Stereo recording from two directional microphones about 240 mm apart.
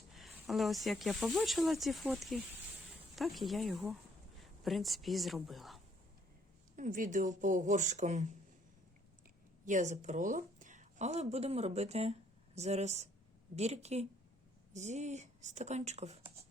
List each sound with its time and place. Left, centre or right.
0.1 s speech: centre
6.7 s speech: right
9.6 s speech: right